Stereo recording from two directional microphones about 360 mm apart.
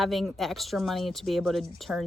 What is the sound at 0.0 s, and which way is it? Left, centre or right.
A woman's voice, centre.